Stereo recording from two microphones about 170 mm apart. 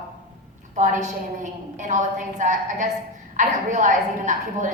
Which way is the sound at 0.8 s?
45° right (ahead or behind).